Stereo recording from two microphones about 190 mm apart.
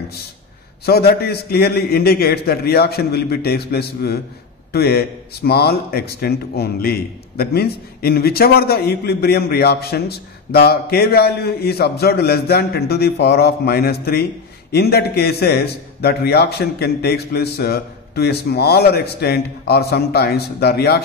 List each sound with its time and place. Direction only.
0.8 s speech: 55° left (ahead or behind)